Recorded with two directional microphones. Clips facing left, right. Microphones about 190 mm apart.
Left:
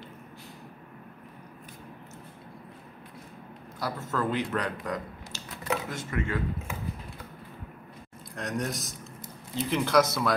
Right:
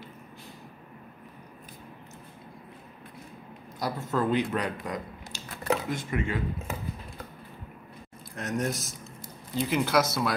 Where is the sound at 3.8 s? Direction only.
15° right (ahead or behind).